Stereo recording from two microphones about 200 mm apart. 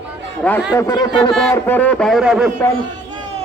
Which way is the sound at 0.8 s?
15° left (ahead or behind).